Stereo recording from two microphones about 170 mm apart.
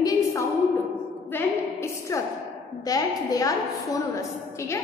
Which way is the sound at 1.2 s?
15° left (ahead or behind).